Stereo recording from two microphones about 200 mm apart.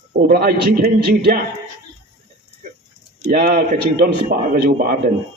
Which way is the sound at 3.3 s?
50° right (ahead or behind).